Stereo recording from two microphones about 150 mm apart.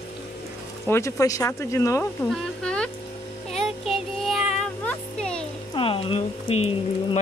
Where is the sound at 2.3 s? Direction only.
5° left (ahead or behind).